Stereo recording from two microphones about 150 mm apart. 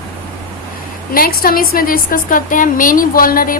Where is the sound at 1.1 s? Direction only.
75° left (ahead or behind).